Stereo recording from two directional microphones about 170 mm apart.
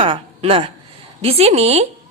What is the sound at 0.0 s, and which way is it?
A woman's voice, 30° right (ahead or behind).